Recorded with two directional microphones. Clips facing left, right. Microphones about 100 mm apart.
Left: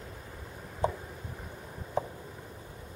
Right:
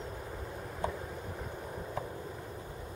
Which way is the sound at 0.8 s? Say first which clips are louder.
Left 5 dB; 25° left (ahead or behind).